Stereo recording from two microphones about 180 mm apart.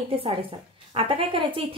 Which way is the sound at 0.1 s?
30° right (ahead or behind).